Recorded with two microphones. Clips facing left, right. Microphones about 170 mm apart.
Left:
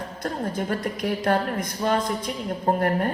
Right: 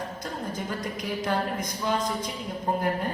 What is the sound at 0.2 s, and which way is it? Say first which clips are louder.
A woman's voice: left 5 dB; 60° left (ahead or behind).